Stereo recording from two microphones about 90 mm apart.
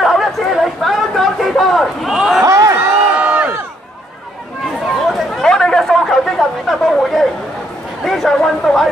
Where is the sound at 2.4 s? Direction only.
35° right (ahead or behind).